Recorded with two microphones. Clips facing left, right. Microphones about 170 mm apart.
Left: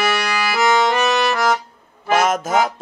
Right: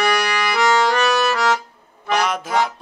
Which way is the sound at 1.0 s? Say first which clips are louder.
Even; 20° left (ahead or behind).